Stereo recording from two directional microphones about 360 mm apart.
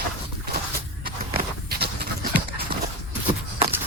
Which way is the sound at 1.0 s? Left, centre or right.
Right.